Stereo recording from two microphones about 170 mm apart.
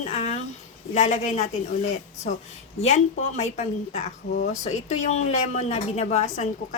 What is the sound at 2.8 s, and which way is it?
A woman's voice, 45° left (ahead or behind).